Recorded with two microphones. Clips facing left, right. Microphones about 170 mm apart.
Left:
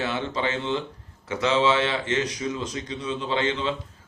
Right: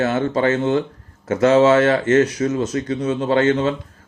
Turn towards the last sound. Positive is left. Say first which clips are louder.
# right 9 dB
turn(degrees=-45)  # may be behind; listen again after turning